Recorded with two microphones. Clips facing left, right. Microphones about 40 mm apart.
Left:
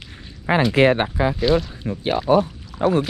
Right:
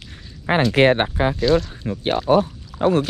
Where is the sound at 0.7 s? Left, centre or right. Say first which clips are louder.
Right 2 dB; right.